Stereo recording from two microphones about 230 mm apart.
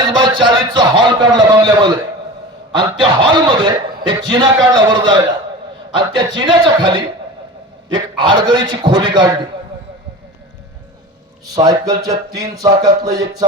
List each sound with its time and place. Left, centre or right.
0.2 s a sound: centre
3.0 s a man's voice: right
8.1 s a man's voice: centre
11.5 s speech: centre